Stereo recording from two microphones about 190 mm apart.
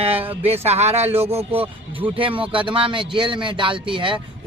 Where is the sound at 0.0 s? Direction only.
30° right (ahead or behind).